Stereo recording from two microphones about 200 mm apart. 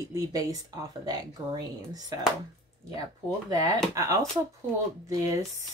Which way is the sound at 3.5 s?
20° right (ahead or behind).